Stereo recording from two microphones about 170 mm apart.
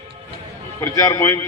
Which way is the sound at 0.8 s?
20° left (ahead or behind).